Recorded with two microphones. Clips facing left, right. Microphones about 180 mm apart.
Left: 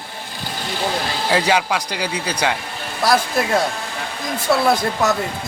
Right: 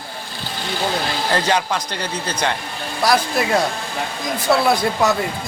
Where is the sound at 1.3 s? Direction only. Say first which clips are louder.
Left 2 dB; 10° left (ahead or behind).